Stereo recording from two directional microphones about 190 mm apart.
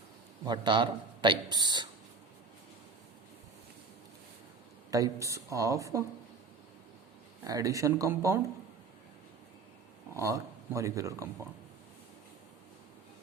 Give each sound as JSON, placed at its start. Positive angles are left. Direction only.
{"t": 0.4, "sound": "a man's voice", "side_deg": -25}
{"t": 4.9, "sound": "speech", "side_deg": -20}
{"t": 7.4, "sound": "speech", "side_deg": -20}
{"t": 10.2, "sound": "speech", "side_deg": -15}